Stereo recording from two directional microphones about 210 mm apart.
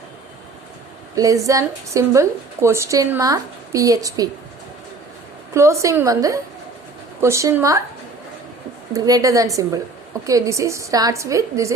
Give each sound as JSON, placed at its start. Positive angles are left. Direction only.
{"t": 1.1, "sound": "a woman's voice", "side_deg": -15}
{"t": 5.5, "sound": "a woman's voice", "side_deg": -15}
{"t": 8.9, "sound": "a woman's voice", "side_deg": -15}